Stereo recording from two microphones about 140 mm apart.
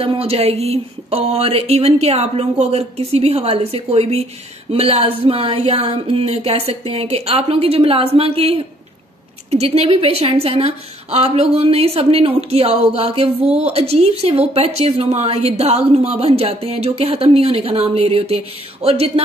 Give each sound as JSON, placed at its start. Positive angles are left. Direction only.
{"t": 0.0, "sound": "speech", "side_deg": -45}